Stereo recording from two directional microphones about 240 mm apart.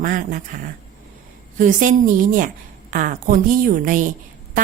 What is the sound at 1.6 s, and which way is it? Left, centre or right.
A woman's voice, right.